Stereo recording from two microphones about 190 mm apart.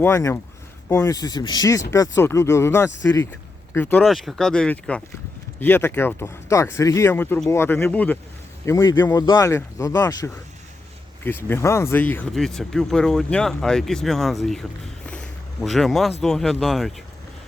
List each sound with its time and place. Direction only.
0.0 s speech: 15° left (ahead or behind)
4.0 s speech: centre (ahead or behind)
15.0 s a sound: 5° left (ahead or behind)
16.2 s speech: centre (ahead or behind)